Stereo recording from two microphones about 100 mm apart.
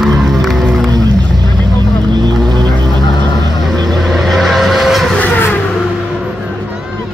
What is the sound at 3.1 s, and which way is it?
Vehicle, 45° left (ahead or behind).